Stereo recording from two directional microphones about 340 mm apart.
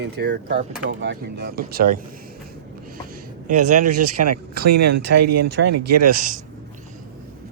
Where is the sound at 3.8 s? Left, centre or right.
Right.